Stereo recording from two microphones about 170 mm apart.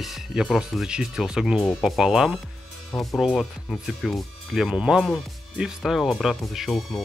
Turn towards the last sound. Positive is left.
turn(degrees=0)  # may be behind; listen again after turning